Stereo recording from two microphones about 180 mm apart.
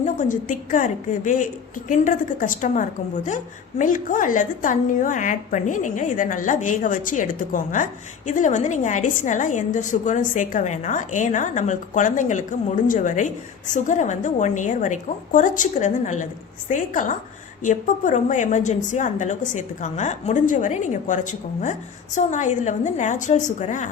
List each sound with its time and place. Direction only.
0.0 s a woman's voice: 45° left (ahead or behind)